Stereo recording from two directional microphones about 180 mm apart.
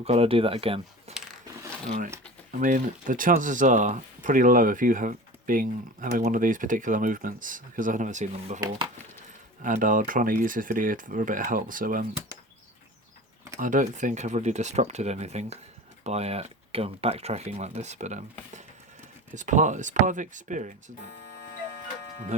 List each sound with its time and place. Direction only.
0.0 s speech: 35° right (ahead or behind)
2.5 s speech: 45° right (ahead or behind)
9.6 s speech: 45° right (ahead or behind)
13.6 s speech: 45° right (ahead or behind)